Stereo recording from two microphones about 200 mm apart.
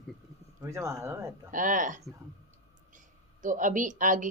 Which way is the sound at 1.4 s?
40° right (ahead or behind).